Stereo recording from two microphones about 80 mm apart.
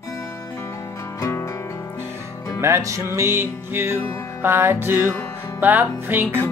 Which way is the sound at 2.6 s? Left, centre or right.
Right.